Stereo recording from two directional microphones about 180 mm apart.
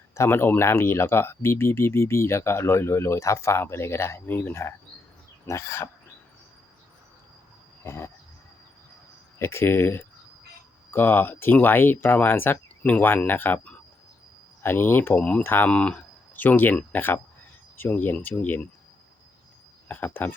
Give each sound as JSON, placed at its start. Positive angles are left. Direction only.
{"t": 0.1, "sound": "speech", "side_deg": 15}
{"t": 7.9, "sound": "speech", "side_deg": 15}
{"t": 9.4, "sound": "speech", "side_deg": 15}
{"t": 19.9, "sound": "speech", "side_deg": 10}